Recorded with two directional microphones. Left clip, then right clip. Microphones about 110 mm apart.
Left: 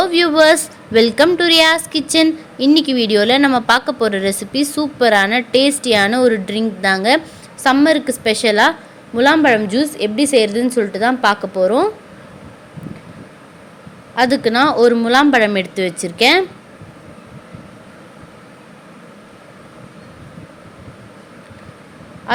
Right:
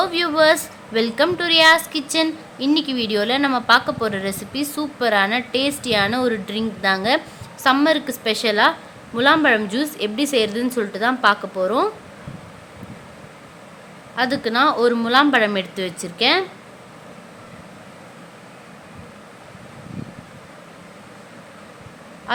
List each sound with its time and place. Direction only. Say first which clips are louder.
0.0 s a woman's voice: left 5 dB; 45° left (ahead or behind)
14.2 s a woman's voice: left 5 dB; 40° left (ahead or behind)